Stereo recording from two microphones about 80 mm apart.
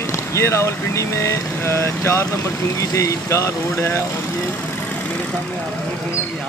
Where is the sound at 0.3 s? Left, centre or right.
Left.